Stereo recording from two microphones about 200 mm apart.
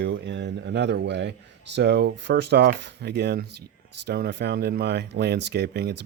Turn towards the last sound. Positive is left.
turn(degrees=-55)  # may be behind; listen again after turning